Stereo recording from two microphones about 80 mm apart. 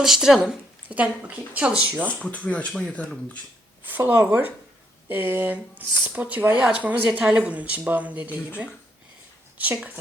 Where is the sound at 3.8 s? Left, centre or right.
Right.